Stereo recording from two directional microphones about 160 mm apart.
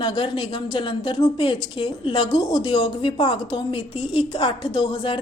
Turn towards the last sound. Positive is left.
turn(degrees=30)  # may be behind; listen again after turning